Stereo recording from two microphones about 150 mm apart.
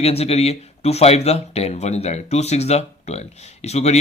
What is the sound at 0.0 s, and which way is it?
Speech, 45° left (ahead or behind).